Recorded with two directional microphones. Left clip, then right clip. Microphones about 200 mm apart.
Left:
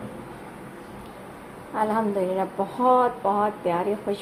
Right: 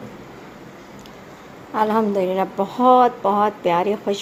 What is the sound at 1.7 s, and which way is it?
A woman's voice, 40° right (ahead or behind).